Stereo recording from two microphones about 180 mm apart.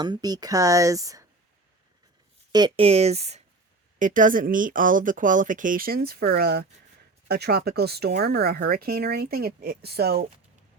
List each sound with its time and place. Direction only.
0.0 s speech: 25° right (ahead or behind)
2.5 s speech: 25° right (ahead or behind); by 10.2 s 60° right (ahead or behind)